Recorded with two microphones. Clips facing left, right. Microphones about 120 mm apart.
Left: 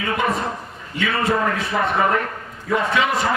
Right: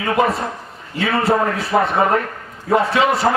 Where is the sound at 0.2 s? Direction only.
30° right (ahead or behind).